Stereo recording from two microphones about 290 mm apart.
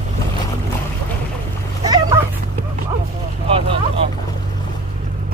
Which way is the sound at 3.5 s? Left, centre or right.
Centre.